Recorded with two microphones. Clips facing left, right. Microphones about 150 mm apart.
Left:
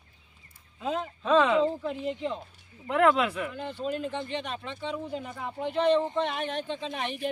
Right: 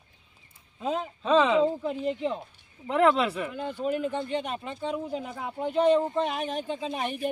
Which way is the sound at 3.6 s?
45° right (ahead or behind).